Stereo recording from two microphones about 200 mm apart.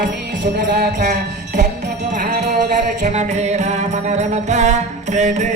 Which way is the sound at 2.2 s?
35° right (ahead or behind).